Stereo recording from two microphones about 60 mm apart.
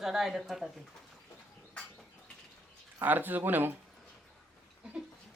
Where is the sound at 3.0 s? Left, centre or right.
Right.